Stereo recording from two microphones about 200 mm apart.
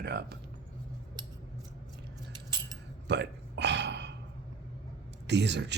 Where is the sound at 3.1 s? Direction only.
60° right (ahead or behind).